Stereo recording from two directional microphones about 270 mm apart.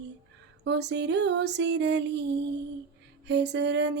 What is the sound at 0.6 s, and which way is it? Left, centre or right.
Music, right.